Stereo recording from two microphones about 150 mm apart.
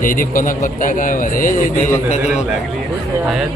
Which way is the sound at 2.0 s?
50° left (ahead or behind).